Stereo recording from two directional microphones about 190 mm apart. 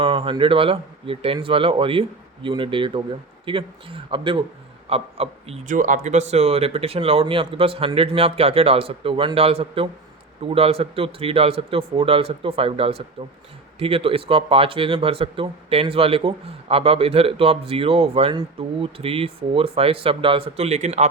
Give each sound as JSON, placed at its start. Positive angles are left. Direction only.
{"t": 0.0, "sound": "speech", "side_deg": -30}